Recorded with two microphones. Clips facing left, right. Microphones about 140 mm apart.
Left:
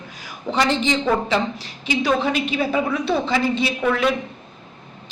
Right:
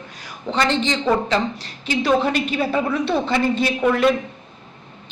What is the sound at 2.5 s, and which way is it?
A man's voice, centre (ahead or behind).